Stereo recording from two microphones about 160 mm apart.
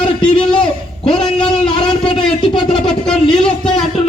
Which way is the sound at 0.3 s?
30° left (ahead or behind).